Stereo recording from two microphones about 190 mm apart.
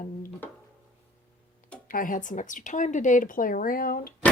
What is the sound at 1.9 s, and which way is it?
Speech, 45° left (ahead or behind).